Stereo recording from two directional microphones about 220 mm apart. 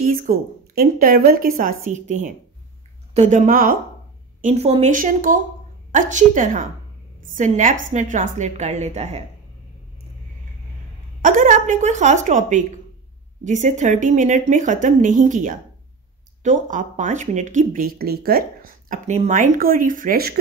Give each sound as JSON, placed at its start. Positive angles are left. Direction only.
{"t": 0.0, "sound": "speech", "side_deg": -40}
{"t": 11.2, "sound": "speech", "side_deg": -35}